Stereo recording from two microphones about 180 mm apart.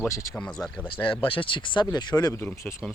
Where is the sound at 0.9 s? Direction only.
30° left (ahead or behind).